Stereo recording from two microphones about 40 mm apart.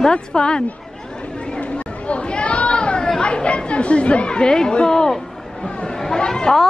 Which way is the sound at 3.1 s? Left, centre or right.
Left.